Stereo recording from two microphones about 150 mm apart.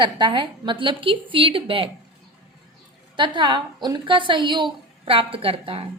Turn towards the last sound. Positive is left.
turn(degrees=-40)  # may be behind; listen again after turning